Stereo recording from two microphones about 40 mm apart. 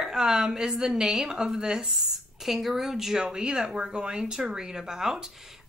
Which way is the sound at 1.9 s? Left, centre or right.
Centre.